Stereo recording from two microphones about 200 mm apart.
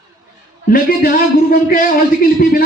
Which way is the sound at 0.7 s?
45° left (ahead or behind).